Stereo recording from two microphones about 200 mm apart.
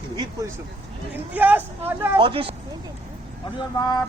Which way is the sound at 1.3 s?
10° right (ahead or behind).